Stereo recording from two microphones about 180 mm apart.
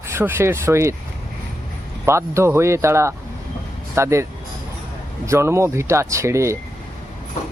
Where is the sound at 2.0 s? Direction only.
15° right (ahead or behind).